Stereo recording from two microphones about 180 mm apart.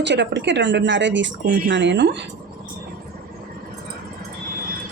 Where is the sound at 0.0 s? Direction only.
75° right (ahead or behind).